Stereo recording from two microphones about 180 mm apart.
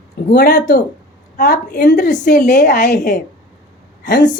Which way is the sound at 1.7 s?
65° left (ahead or behind).